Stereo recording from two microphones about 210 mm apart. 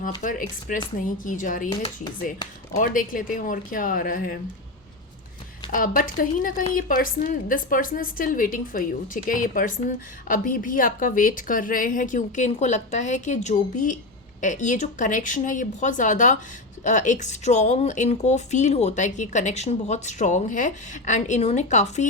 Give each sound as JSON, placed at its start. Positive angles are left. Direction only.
{"t": 0.2, "sound": "speech", "side_deg": 40}
{"t": 5.7, "sound": "speech", "side_deg": 40}